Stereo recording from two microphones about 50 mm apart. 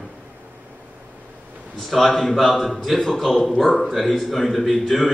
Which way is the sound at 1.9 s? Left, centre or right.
Centre.